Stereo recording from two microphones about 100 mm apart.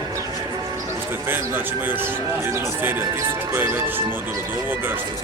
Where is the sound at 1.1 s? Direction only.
20° right (ahead or behind).